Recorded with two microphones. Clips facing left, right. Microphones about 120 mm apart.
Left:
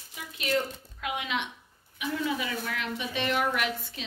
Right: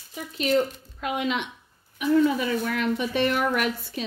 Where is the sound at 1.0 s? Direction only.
45° right (ahead or behind).